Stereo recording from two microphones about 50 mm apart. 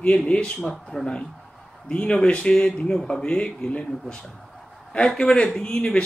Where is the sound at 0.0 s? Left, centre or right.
Left.